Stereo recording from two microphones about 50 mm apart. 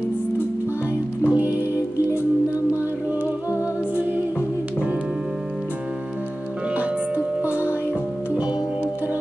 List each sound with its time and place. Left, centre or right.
1.2 s music: right
3.9 s music: right
6.7 s music: right